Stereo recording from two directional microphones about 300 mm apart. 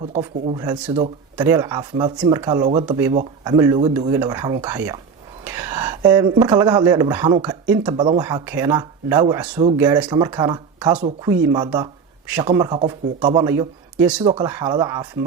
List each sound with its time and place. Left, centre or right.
0.2 s speech: centre